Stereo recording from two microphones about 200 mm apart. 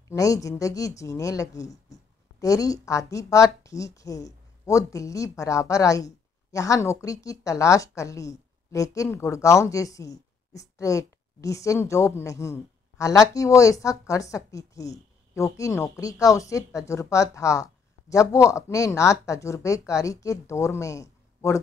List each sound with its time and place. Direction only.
0.1 s a woman's voice: 15° left (ahead or behind)